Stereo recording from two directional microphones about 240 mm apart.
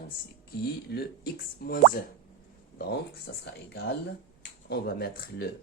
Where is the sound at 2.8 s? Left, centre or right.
Left.